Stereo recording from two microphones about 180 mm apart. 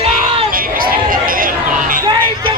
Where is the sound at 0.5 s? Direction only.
50° right (ahead or behind).